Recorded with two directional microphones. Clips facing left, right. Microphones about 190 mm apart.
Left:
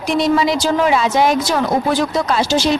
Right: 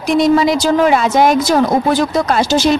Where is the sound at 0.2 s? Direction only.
45° right (ahead or behind).